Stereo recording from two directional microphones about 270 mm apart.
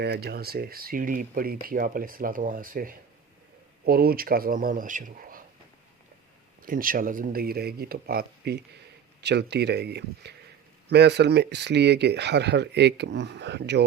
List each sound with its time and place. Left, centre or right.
0.0 s speech: right
6.6 s speech: right